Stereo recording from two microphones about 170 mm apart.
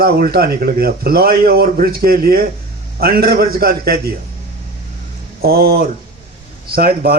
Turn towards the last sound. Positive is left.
turn(degrees=-65)  # may be behind; listen again after turning